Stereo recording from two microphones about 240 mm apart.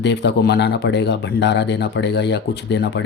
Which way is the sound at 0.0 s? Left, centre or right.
Left.